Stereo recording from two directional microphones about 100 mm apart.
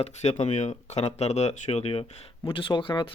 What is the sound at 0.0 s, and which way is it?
Speech, 90° left.